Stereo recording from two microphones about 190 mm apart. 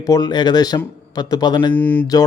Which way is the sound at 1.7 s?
10° left (ahead or behind).